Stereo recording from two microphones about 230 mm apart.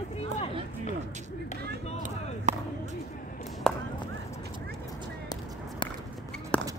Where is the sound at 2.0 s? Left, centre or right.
Right.